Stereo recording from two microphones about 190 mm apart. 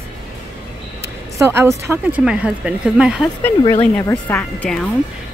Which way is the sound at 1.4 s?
15° right (ahead or behind).